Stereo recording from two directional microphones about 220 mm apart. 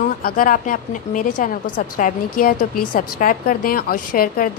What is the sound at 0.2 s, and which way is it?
A woman's voice, 40° left (ahead or behind).